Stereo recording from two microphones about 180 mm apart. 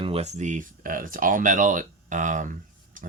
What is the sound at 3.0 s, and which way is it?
Stir, 50° right (ahead or behind).